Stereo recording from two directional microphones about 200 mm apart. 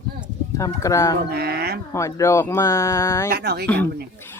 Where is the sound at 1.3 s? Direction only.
50° right (ahead or behind).